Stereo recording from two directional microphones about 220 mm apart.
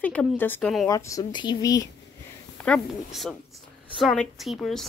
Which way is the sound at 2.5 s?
5° left (ahead or behind).